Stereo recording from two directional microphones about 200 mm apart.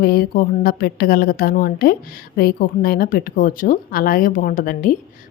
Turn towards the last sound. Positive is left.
turn(degrees=45)  # may be behind; listen again after turning